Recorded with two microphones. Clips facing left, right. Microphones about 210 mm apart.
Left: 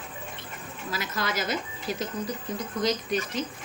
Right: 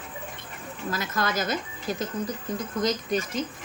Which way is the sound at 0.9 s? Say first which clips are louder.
Right 2 dB; 50° right (ahead or behind).